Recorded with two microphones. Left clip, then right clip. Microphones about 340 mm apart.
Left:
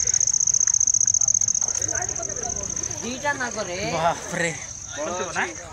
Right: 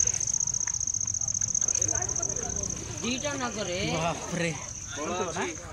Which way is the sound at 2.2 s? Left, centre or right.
Left.